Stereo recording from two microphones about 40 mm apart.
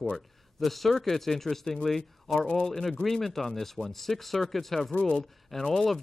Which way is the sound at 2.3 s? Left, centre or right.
Left.